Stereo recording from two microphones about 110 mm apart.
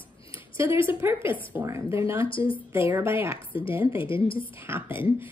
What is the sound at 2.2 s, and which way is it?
Speech, 55° left (ahead or behind).